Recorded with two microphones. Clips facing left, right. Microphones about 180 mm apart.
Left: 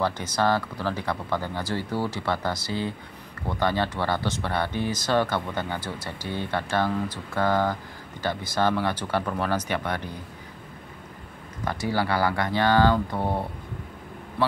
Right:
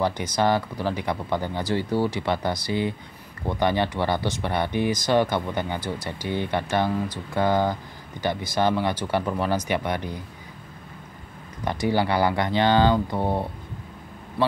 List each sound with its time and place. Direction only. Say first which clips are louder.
0.0 s speech: right 2 dB; 15° right (ahead or behind)
11.6 s speech: right 3 dB; 20° right (ahead or behind)